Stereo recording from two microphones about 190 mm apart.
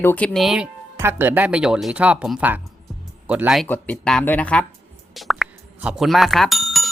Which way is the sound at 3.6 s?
10° left (ahead or behind).